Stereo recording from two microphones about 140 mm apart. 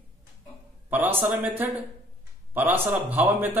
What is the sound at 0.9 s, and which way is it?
Speech, 10° right (ahead or behind).